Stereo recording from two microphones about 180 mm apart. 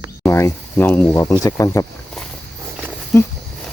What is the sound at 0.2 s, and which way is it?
Speech, 15° left (ahead or behind).